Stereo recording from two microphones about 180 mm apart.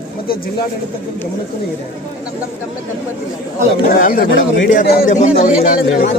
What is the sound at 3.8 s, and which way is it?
Speech, 50° left (ahead or behind).